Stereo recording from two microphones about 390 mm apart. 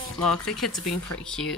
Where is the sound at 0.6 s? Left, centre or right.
Left.